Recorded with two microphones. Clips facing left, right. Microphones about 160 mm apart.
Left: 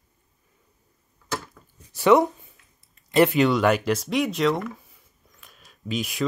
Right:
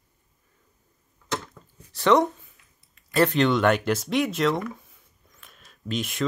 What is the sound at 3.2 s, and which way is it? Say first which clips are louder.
Speech: left 1 dB; 5° left (ahead or behind).